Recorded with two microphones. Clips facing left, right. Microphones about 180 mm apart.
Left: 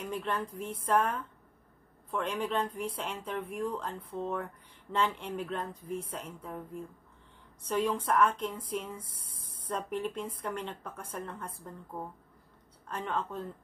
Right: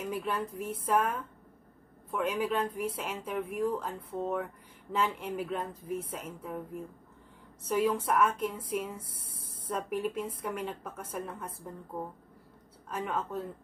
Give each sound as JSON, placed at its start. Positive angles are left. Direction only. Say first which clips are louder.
{"t": 0.0, "sound": "speech", "louder": "right 1 dB", "side_deg": -5}
{"t": 12.8, "sound": "speech", "louder": "right 1 dB", "side_deg": -5}